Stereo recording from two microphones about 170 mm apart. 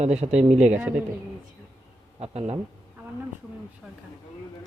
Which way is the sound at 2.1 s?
35° right (ahead or behind).